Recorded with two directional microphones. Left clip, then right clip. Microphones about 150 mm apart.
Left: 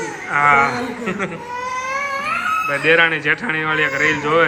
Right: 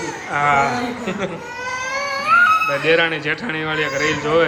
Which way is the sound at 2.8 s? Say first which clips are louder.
Left 2 dB; 10° right (ahead or behind).